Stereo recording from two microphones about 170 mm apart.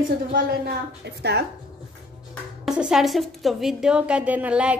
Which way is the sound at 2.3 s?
5° right (ahead or behind).